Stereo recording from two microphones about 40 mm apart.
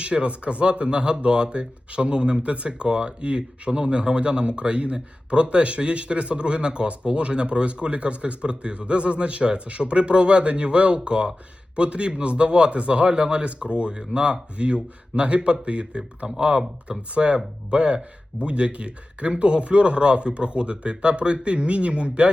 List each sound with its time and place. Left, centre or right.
0.0 s speech: right